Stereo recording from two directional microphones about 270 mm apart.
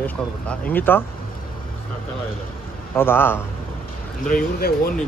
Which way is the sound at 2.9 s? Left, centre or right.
Centre.